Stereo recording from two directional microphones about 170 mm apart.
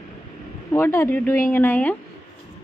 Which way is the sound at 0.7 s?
15° left (ahead or behind).